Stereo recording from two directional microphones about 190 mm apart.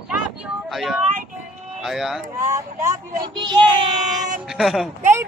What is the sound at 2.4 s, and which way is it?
Speech, 15° right (ahead or behind).